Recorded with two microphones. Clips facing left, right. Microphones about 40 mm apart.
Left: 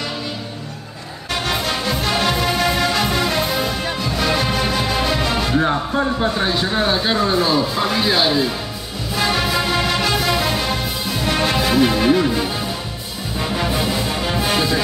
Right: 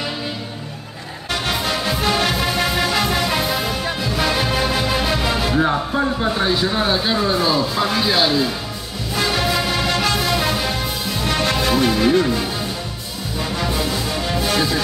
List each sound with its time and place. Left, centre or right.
1.3 s music: centre
6.8 s speech: centre
9.1 s music: centre
13.6 s music: centre